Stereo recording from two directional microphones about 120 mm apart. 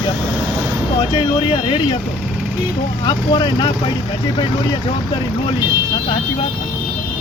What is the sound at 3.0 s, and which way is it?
Speech, 35° left (ahead or behind).